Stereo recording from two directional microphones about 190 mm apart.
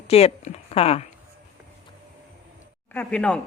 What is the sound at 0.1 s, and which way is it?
Speech, 35° left (ahead or behind).